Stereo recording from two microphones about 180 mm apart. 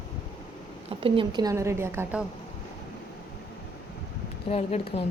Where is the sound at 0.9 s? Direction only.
30° right (ahead or behind); by 2.2 s 10° right (ahead or behind).